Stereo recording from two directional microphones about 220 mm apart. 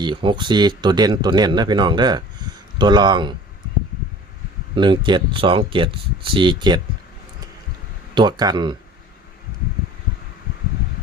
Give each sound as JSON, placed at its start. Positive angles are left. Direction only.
{"t": 0.0, "sound": "speech", "side_deg": -20}
{"t": 4.7, "sound": "speech", "side_deg": -20}
{"t": 8.1, "sound": "speech", "side_deg": -20}